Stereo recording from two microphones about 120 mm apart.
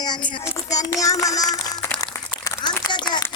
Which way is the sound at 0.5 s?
30° left (ahead or behind).